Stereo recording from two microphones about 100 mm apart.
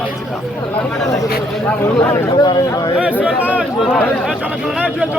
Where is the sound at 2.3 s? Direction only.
40° left (ahead or behind).